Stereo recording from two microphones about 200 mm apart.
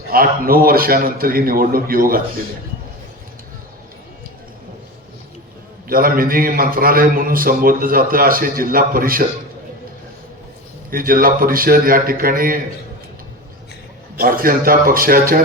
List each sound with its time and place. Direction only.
0.1 s a man's voice: 45° right (ahead or behind)
5.9 s a man's voice: 45° right (ahead or behind)
10.9 s a man's voice: 45° right (ahead or behind)
14.2 s a man's voice: 45° right (ahead or behind)